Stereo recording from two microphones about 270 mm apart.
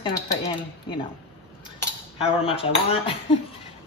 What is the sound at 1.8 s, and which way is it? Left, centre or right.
A woman's voice, left.